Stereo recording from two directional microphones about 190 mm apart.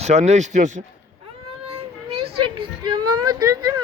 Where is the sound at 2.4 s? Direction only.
25° right (ahead or behind).